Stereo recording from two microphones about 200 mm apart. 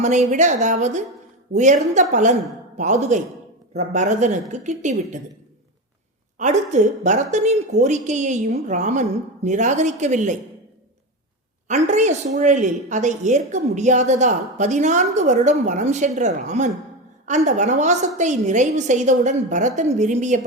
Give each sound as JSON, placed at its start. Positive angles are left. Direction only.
{"t": 0.0, "sound": "a woman's voice", "side_deg": -35}
{"t": 6.4, "sound": "a woman's voice", "side_deg": -35}
{"t": 11.7, "sound": "a woman's voice", "side_deg": -35}